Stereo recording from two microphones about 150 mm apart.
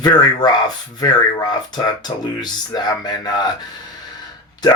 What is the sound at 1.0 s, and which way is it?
Speech, 25° left (ahead or behind).